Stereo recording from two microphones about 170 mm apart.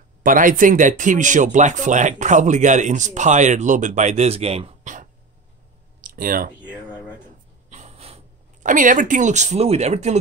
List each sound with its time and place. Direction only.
0.2 s speech: 55° right (ahead or behind)
5.9 s clicking: 55° right (ahead or behind)
7.7 s a sound: 40° right (ahead or behind)
8.6 s speech: 50° right (ahead or behind)